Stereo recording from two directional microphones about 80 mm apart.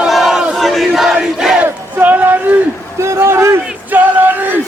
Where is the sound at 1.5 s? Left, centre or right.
Right.